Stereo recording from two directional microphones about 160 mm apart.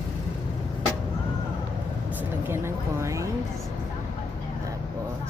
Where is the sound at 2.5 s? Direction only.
15° right (ahead or behind).